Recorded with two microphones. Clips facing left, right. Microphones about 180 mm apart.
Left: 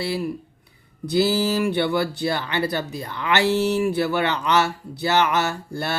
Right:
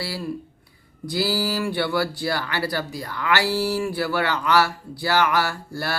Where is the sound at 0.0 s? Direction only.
20° left (ahead or behind).